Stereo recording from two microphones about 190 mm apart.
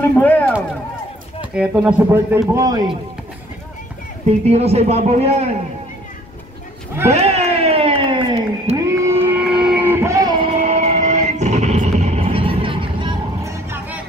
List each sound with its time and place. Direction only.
0.1 s speech: 10° left (ahead or behind)
1.4 s speech: 5° right (ahead or behind)
4.5 s a man's voice: 35° right (ahead or behind)
7.1 s a sound: 35° right (ahead or behind)
8.7 s vehicle: 15° right (ahead or behind)
10.4 s music: 35° right (ahead or behind)
13.4 s music: 15° right (ahead or behind)